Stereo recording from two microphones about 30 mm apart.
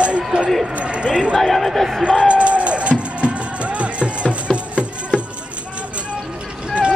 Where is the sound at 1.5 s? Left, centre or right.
Centre.